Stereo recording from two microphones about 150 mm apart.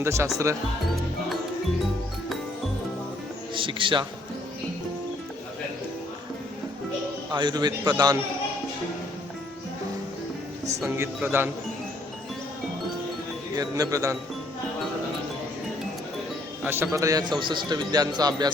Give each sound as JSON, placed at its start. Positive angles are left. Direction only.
{"t": 0.0, "sound": "speech", "side_deg": -20}
{"t": 3.5, "sound": "speech", "side_deg": -35}
{"t": 7.3, "sound": "a man's voice", "side_deg": -30}
{"t": 10.8, "sound": "speech", "side_deg": -15}
{"t": 13.6, "sound": "a man's voice", "side_deg": -20}
{"t": 16.6, "sound": "a man's voice", "side_deg": -15}